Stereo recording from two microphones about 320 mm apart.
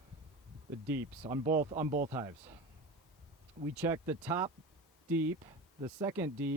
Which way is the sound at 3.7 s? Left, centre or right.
Centre.